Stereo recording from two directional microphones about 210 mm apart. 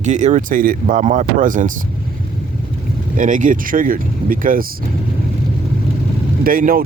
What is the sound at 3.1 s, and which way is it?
Speech, 40° right (ahead or behind).